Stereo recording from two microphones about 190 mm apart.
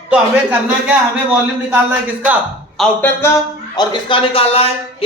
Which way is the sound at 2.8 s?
10° left (ahead or behind).